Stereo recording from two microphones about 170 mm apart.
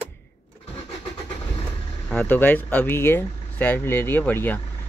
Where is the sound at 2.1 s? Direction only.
10° left (ahead or behind).